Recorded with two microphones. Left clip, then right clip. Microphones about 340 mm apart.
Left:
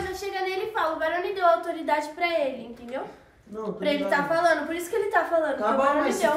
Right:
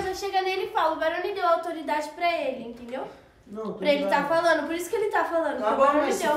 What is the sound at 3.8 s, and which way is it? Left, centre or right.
A woman's voice, centre.